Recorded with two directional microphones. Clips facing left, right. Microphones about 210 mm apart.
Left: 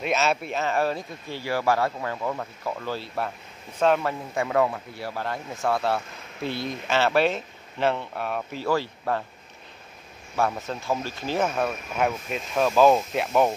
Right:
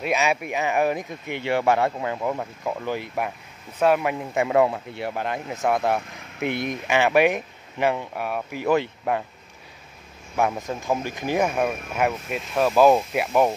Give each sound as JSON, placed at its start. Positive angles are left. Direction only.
{"t": 0.0, "sound": "speech", "side_deg": -15}
{"t": 8.6, "sound": "speech", "side_deg": -20}
{"t": 10.3, "sound": "speech", "side_deg": -15}